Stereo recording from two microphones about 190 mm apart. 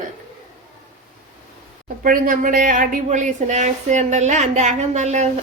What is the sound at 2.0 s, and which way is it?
Speech, 45° right (ahead or behind).